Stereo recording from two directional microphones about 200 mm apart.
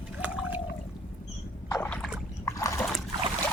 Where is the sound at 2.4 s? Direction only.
15° left (ahead or behind).